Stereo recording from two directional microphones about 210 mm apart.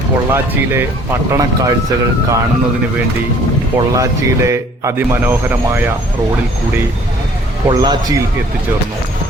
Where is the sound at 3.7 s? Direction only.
15° right (ahead or behind).